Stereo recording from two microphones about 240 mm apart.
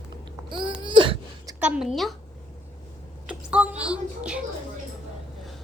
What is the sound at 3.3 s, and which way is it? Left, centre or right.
A child's voice, centre.